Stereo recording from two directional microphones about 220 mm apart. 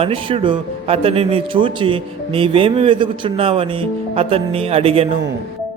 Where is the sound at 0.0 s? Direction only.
25° right (ahead or behind).